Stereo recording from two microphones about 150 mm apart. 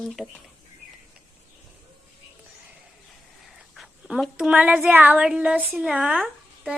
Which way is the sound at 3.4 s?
Centre (ahead or behind).